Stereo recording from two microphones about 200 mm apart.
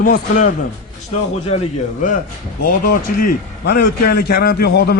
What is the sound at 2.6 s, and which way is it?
A man's voice, 45° left (ahead or behind).